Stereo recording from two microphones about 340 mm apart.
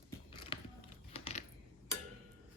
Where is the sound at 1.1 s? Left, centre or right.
Centre.